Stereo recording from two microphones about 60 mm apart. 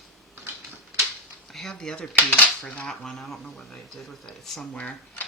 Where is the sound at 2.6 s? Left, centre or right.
Left.